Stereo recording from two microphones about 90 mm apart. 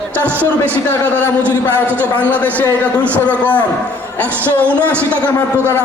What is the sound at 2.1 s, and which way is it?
A man's voice, 15° left (ahead or behind).